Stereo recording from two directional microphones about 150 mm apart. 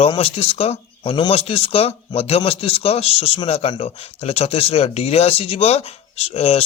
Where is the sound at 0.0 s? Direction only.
40° left (ahead or behind).